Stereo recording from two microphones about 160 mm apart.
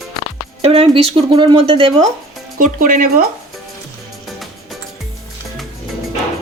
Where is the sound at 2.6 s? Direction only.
60° right (ahead or behind).